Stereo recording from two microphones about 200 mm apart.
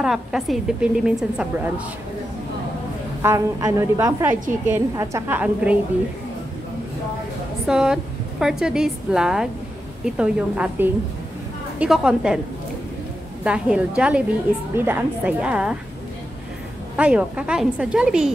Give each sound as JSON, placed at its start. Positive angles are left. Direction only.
{"t": 0.0, "sound": "a woman's voice", "side_deg": -5}
{"t": 3.2, "sound": "a woman's voice", "side_deg": -15}
{"t": 7.6, "sound": "a woman's voice", "side_deg": -5}
{"t": 13.4, "sound": "a woman's voice", "side_deg": -5}
{"t": 16.9, "sound": "a woman's voice", "side_deg": -5}